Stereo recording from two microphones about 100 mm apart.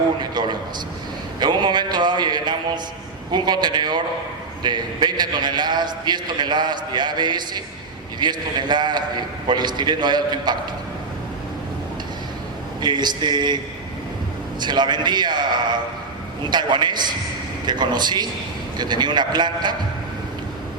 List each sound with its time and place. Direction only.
0.2 s a sound: 45° right (ahead or behind)
1.4 s a man's voice: 50° right (ahead or behind)
12.8 s a man's voice: 45° right (ahead or behind)
14.6 s a man's voice: 45° right (ahead or behind)